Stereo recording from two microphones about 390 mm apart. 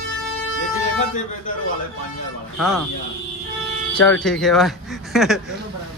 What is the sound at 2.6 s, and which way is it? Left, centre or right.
Speech, centre.